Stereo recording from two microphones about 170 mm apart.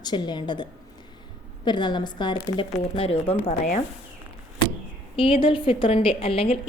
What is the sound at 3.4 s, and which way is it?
Speech, 45° left (ahead or behind).